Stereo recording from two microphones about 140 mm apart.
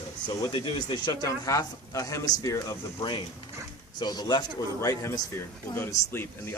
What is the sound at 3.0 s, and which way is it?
A man's voice, 35° left (ahead or behind).